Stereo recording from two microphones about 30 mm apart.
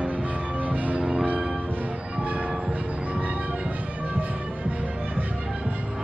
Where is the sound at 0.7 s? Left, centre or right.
Right.